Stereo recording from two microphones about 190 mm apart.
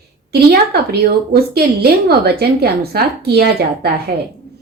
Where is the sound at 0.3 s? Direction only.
60° right (ahead or behind).